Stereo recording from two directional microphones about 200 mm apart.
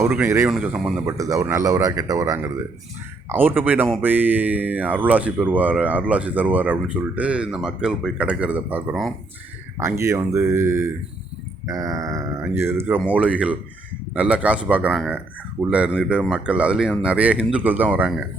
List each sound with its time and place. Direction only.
0.0 s speech: 10° right (ahead or behind)
1.0 s speech: 15° right (ahead or behind)